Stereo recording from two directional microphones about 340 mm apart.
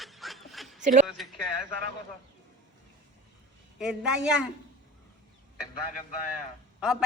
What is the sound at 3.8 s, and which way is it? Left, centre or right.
Speech, centre.